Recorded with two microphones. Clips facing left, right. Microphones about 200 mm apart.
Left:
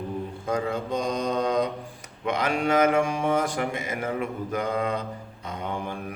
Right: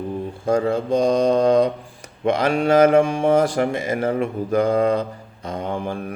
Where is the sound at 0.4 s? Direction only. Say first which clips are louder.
Right 8 dB; 30° right (ahead or behind).